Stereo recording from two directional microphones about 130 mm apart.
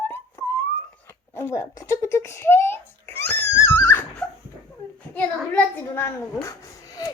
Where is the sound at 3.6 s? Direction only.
20° left (ahead or behind).